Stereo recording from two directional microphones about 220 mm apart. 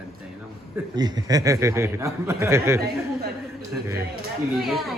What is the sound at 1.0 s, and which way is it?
A man's voice, 20° right (ahead or behind).